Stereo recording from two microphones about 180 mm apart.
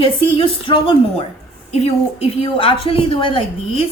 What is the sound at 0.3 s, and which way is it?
A woman's voice, 30° left (ahead or behind).